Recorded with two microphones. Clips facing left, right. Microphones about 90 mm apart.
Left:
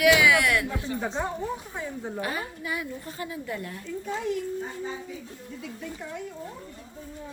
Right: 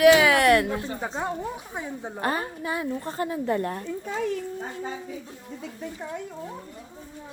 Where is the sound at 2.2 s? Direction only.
40° right (ahead or behind).